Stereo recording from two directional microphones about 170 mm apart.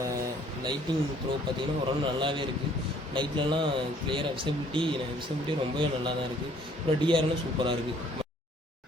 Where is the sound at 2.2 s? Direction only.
30° right (ahead or behind).